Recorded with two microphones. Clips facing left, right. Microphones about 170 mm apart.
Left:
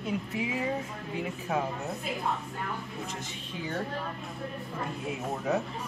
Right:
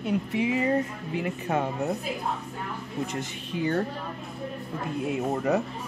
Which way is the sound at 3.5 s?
Centre (ahead or behind).